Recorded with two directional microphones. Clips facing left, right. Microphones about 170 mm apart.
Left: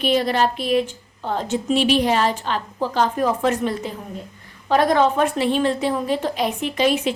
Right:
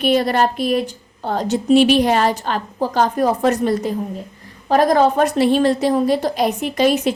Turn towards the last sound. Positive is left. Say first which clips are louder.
# right 3 dB
turn(degrees=-40)  # may be behind; listen again after turning